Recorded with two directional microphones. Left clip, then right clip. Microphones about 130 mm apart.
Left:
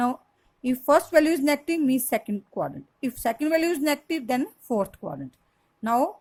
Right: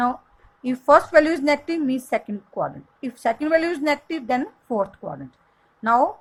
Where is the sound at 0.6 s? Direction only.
40° left (ahead or behind).